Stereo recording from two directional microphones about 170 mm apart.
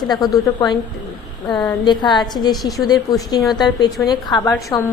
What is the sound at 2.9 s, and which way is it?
A woman's voice, 25° left (ahead or behind).